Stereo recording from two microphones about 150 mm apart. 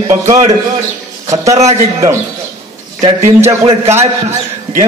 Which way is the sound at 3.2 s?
15° right (ahead or behind).